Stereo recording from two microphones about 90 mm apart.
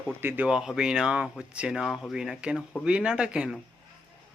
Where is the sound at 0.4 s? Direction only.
10° right (ahead or behind).